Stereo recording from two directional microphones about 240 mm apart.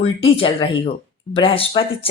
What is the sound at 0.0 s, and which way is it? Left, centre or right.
A woman's voice, left.